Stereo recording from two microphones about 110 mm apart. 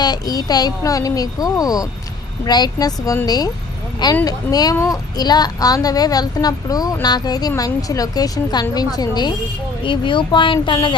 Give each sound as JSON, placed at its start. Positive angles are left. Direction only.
{"t": 0.0, "sound": "a child's voice", "side_deg": 40}
{"t": 9.8, "sound": "speech", "side_deg": 50}